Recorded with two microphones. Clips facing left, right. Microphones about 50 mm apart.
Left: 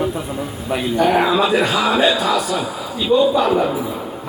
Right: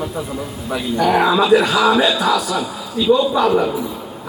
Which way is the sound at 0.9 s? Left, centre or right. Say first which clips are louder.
Right 1 dB; centre.